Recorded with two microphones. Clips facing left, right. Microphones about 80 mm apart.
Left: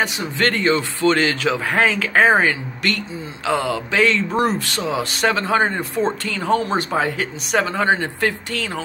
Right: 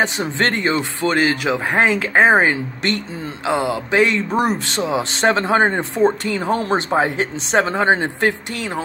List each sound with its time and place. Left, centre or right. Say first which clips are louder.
0.0 s speech: right 2 dB; right